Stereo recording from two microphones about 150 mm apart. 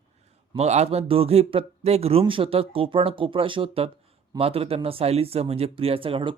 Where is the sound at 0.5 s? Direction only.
45° right (ahead or behind).